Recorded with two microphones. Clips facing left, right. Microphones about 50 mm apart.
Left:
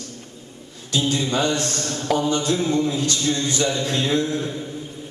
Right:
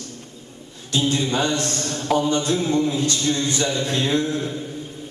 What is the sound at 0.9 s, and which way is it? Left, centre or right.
A man's voice, right.